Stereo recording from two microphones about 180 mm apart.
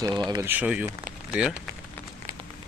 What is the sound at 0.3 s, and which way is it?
Speech, 15° right (ahead or behind).